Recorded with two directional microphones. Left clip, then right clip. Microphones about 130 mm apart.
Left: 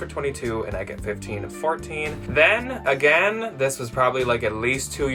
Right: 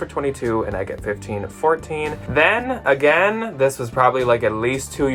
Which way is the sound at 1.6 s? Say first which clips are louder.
Right 6 dB; 40° right (ahead or behind).